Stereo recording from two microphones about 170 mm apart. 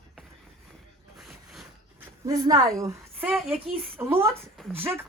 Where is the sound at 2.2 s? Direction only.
20° right (ahead or behind).